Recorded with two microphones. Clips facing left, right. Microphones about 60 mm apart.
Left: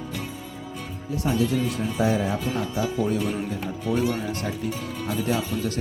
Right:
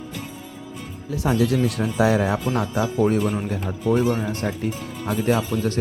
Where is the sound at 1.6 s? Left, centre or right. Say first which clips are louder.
Right 4 dB; right.